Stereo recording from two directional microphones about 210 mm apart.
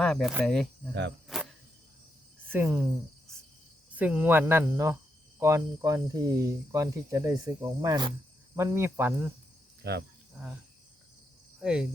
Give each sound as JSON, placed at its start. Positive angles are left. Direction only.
{"t": 0.0, "sound": "speech", "side_deg": 0}
{"t": 1.3, "sound": "cricket", "side_deg": 0}
{"t": 2.5, "sound": "speech", "side_deg": -10}
{"t": 3.9, "sound": "speech", "side_deg": -5}
{"t": 9.8, "sound": "speech", "side_deg": -50}
{"t": 11.6, "sound": "speech", "side_deg": -5}